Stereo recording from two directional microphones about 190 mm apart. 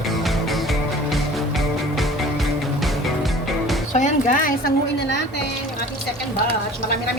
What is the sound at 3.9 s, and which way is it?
Music, 40° left (ahead or behind).